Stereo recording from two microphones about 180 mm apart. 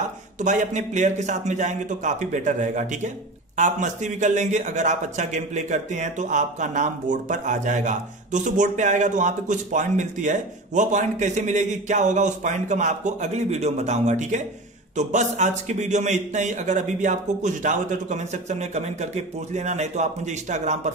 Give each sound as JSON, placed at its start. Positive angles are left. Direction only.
{"t": 0.4, "sound": "a man's voice", "side_deg": -40}